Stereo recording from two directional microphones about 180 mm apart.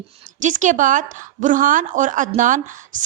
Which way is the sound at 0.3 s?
45° right (ahead or behind).